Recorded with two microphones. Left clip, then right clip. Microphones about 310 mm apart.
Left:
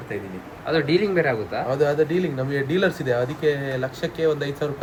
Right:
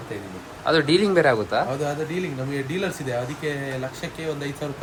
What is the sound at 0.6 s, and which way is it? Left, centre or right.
Speech, centre.